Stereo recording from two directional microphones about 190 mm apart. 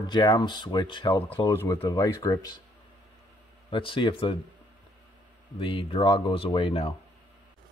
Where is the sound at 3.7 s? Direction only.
25° left (ahead or behind).